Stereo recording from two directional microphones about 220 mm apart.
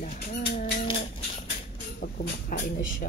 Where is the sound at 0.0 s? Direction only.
40° left (ahead or behind).